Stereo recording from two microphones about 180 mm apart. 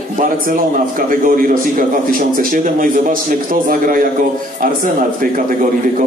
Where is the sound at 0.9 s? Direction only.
50° right (ahead or behind).